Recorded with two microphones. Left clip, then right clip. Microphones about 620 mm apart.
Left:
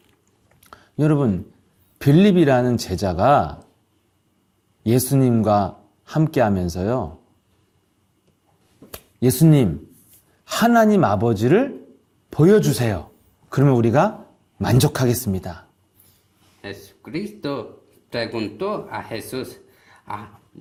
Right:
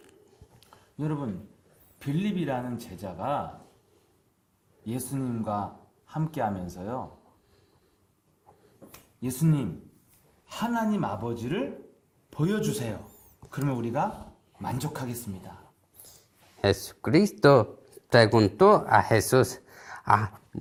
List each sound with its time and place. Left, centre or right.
0.9 s speech: left
4.9 s speech: left
10.4 s speech: left
16.6 s speech: right
18.1 s speech: right